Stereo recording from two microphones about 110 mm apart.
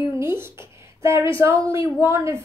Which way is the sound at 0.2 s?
20° right (ahead or behind).